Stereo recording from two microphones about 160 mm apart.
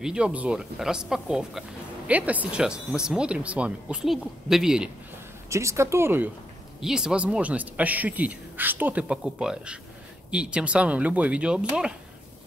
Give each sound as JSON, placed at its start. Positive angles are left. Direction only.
{"t": 0.0, "sound": "speech", "side_deg": -5}
{"t": 5.5, "sound": "speech", "side_deg": -20}